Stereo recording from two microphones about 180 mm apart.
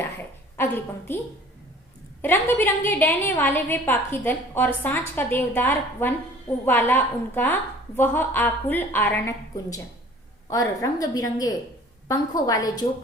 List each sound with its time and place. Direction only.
0.5 s a woman's voice: 10° left (ahead or behind)
2.2 s a woman's voice: 15° left (ahead or behind)